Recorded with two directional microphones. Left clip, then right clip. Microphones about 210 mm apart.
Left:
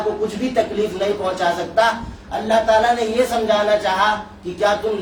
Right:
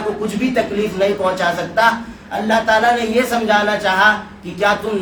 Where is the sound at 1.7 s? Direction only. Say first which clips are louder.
Right 2 dB; 25° right (ahead or behind).